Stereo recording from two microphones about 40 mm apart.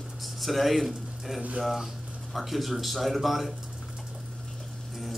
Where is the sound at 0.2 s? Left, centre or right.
Centre.